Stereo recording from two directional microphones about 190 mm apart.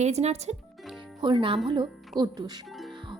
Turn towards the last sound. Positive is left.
turn(degrees=0)  # may be behind; listen again after turning